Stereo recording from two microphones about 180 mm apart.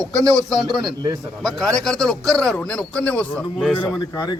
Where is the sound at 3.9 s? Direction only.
25° left (ahead or behind).